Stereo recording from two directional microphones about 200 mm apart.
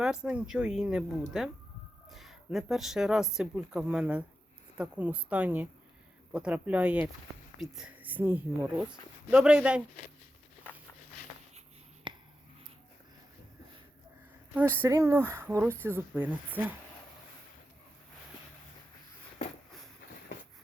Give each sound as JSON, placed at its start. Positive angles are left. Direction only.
{"t": 0.0, "sound": "speech", "side_deg": -5}
{"t": 12.1, "sound": "a sound", "side_deg": -25}
{"t": 14.8, "sound": "speech", "side_deg": -15}